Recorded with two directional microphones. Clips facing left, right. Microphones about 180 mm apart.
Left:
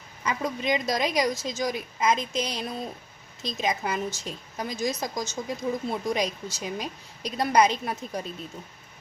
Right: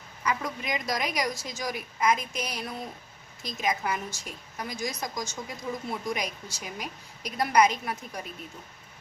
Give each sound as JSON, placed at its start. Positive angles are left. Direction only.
{"t": 0.3, "sound": "a woman's voice", "side_deg": 25}